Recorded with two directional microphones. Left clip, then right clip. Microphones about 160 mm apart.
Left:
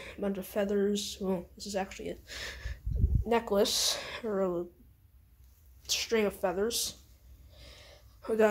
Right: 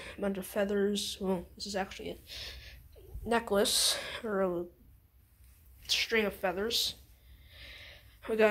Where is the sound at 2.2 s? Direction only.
45° left (ahead or behind).